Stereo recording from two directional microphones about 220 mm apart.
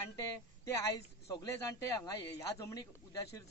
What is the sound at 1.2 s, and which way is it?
Speech, 15° left (ahead or behind).